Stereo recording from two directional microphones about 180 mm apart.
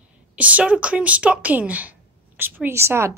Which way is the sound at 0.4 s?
10° right (ahead or behind).